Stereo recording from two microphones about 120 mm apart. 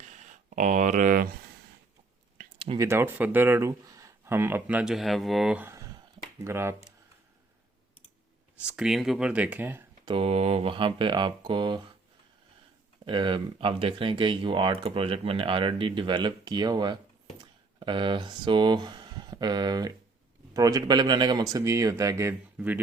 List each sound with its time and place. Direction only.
0.1 s a sound: 90° right
2.7 s speech: 20° right (ahead or behind)
4.9 s speech: centre (ahead or behind)
5.5 s a sound: 20° right (ahead or behind)
6.4 s speech: 20° right (ahead or behind)
8.5 s speech: 5° right (ahead or behind)
10.1 s speech: 50° right (ahead or behind)
13.1 s speech: 40° right (ahead or behind); by 22.4 s 25° right (ahead or behind)
22.5 s speech: 10° right (ahead or behind)